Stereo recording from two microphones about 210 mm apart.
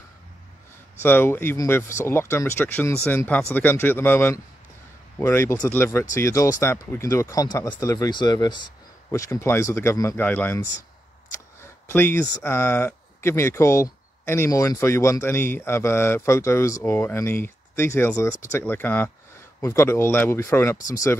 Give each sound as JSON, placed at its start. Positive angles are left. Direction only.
{"t": 1.0, "sound": "speech", "side_deg": 10}
{"t": 11.9, "sound": "speech", "side_deg": 10}